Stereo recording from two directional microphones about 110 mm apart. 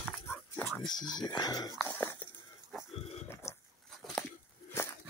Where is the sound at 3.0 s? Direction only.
70° left (ahead or behind).